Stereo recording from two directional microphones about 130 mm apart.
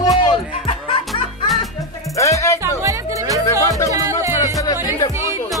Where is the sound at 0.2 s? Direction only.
40° left (ahead or behind).